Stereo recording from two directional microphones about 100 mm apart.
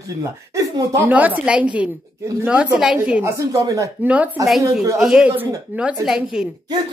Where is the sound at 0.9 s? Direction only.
15° right (ahead or behind).